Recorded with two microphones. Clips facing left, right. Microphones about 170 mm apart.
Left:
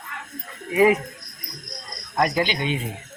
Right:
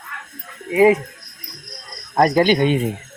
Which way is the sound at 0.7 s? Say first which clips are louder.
Right 4 dB; 25° right (ahead or behind).